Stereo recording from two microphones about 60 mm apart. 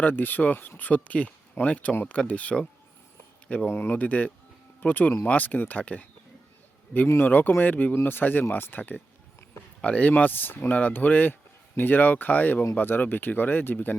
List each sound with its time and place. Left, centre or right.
0.0 s speech: left
3.7 s speech: left
7.3 s speech: left